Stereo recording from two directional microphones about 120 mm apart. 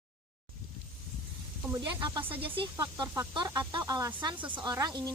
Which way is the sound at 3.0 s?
35° right (ahead or behind).